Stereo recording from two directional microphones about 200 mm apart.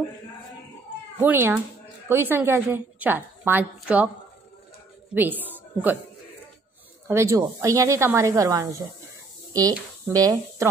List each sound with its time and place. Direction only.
1.2 s a woman's voice: 10° right (ahead or behind)
5.1 s a woman's voice: 10° right (ahead or behind)
7.1 s a woman's voice: 15° right (ahead or behind)